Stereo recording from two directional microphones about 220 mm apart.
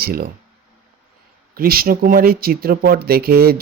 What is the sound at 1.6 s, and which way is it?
Speech, 40° right (ahead or behind).